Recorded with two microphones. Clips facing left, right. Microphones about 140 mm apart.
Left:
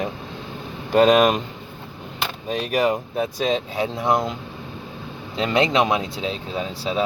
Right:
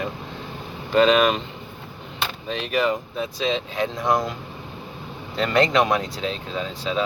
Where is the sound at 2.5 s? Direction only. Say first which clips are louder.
Left 2 dB; 45° left (ahead or behind).